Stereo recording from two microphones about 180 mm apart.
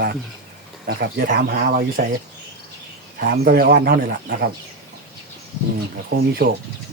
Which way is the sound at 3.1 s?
55° right (ahead or behind).